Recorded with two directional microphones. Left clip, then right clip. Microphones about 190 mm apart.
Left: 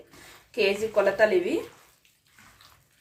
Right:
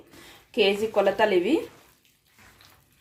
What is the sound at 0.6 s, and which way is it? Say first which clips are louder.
Speech: right 1 dB; 35° right (ahead or behind).